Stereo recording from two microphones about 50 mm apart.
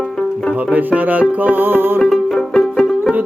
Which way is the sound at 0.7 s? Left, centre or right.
Right.